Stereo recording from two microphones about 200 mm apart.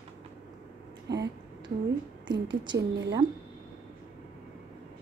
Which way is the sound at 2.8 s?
60° right (ahead or behind).